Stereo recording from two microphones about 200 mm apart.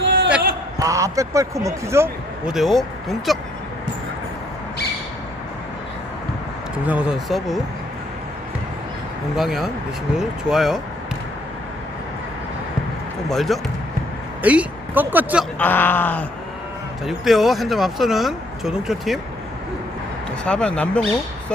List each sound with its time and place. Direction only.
0.0 s a sound: 65° right (ahead or behind)
0.8 s speech: 15° right (ahead or behind)
2.5 s speech: centre (ahead or behind)
6.8 s speech: 5° right (ahead or behind)
9.3 s speech: centre (ahead or behind)
13.3 s speech: centre (ahead or behind)
15.5 s speech: 10° left (ahead or behind)
20.4 s speech: 5° left (ahead or behind)